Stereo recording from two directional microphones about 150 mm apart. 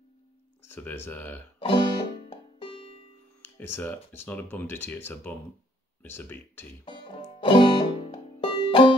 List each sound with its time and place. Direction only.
0.7 s speech: 15° left (ahead or behind)
1.6 s music: 35° left (ahead or behind)
3.5 s speech: 15° left (ahead or behind)
6.8 s music: 35° left (ahead or behind)